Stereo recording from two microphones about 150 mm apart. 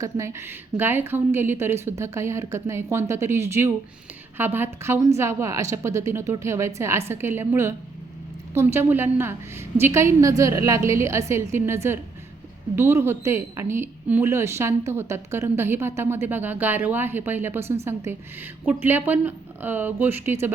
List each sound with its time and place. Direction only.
0.0 s a woman's voice: 20° right (ahead or behind)